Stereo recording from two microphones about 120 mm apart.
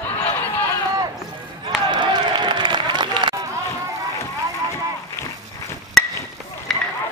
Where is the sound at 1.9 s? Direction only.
40° right (ahead or behind).